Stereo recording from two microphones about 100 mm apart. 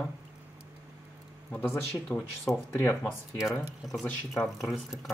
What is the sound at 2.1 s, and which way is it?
Speech, 15° left (ahead or behind).